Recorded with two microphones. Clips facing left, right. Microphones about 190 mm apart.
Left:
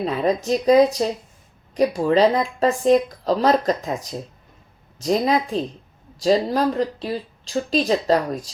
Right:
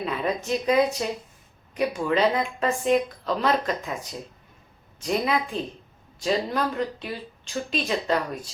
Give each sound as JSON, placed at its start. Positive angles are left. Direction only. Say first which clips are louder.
{"t": 0.0, "sound": "speech", "louder": "left 6 dB", "side_deg": 35}